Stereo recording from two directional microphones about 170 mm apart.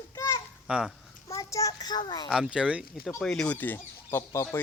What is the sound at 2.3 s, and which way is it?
Speech, 5° right (ahead or behind).